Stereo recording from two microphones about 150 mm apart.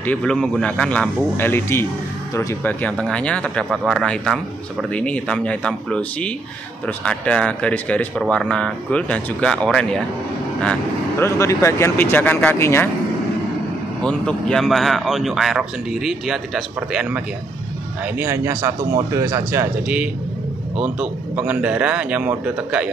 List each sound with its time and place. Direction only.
0.0 s a man's voice: 10° left (ahead or behind)
14.0 s a man's voice: 5° left (ahead or behind); by 19.7 s 20° right (ahead or behind)
20.7 s a man's voice: 10° right (ahead or behind)